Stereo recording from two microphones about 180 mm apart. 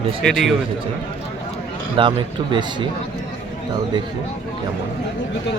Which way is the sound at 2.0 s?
30° right (ahead or behind).